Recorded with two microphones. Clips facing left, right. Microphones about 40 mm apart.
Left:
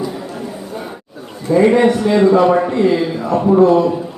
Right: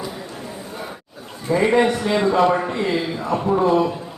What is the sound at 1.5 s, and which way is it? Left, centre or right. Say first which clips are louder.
A man's voice: left 6 dB; centre.